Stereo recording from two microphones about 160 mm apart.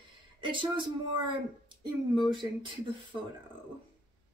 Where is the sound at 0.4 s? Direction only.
30° right (ahead or behind).